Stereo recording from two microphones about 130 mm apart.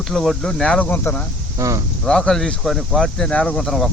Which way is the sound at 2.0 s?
5° left (ahead or behind).